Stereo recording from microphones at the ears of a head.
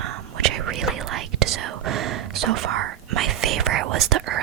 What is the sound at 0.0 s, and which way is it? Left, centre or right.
Whispering, right.